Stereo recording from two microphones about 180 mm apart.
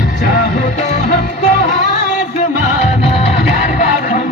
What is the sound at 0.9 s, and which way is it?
Music, 40° left (ahead or behind).